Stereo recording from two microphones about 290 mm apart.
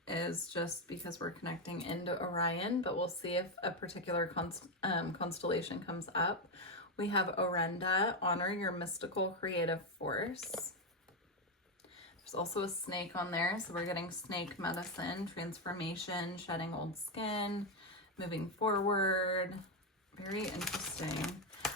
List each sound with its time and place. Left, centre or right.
0.0 s a sound: centre
1.5 s speech: centre
10.5 s speech: centre
12.2 s speech: left
20.4 s speech: centre